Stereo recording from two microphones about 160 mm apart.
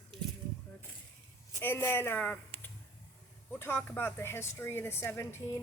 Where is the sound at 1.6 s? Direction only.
15° left (ahead or behind).